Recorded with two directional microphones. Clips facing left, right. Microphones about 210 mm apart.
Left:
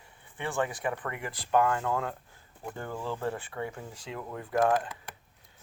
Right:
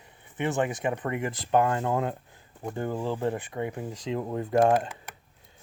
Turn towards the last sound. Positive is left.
turn(degrees=-25)  # may be behind; listen again after turning